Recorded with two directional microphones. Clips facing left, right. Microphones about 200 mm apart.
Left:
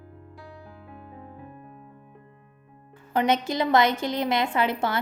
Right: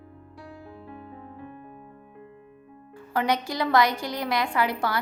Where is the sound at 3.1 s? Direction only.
20° left (ahead or behind).